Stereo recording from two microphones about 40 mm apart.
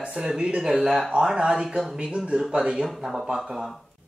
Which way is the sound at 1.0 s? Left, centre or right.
Right.